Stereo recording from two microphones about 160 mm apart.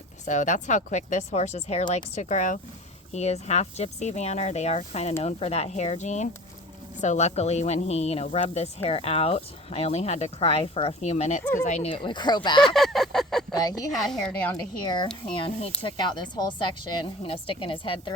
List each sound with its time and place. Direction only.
0.3 s speech: 50° left (ahead or behind)
11.9 s speech: 30° left (ahead or behind)
12.6 s a sound: centre (ahead or behind)
13.5 s a woman's voice: 25° left (ahead or behind)
13.9 s a woman's voice: centre (ahead or behind)
14.5 s speech: 30° left (ahead or behind)